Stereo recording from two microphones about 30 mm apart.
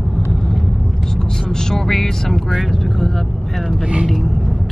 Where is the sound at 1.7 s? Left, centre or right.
Centre.